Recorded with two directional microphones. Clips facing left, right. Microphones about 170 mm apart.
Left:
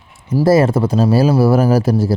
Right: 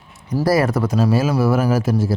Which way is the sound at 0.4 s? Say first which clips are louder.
Left 5 dB; 25° left (ahead or behind).